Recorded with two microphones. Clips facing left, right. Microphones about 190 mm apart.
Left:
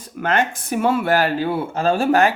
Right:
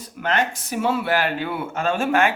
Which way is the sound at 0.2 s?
50° left (ahead or behind).